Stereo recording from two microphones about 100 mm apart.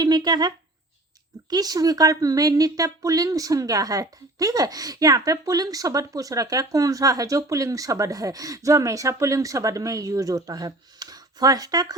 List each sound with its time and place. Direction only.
0.0 s speech: 45° right (ahead or behind)